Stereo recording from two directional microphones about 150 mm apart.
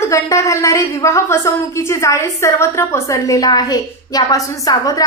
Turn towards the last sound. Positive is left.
turn(degrees=25)  # may be behind; listen again after turning